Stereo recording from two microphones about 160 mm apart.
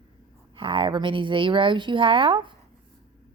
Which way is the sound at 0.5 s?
30° right (ahead or behind).